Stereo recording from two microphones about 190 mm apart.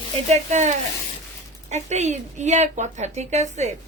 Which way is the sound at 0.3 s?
35° right (ahead or behind).